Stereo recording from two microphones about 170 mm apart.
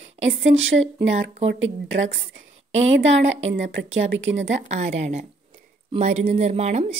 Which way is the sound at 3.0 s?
90° right.